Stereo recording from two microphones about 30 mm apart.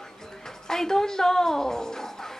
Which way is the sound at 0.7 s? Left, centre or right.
Centre.